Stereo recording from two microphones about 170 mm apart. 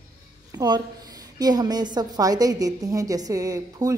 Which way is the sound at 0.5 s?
25° right (ahead or behind).